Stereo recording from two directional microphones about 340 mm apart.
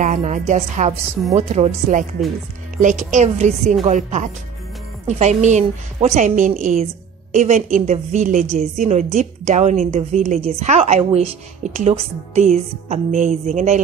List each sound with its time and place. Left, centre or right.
0.0 s a woman's voice: centre